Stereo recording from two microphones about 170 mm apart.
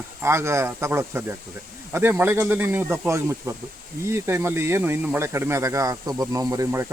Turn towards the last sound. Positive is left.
turn(degrees=-20)  # may be behind; listen again after turning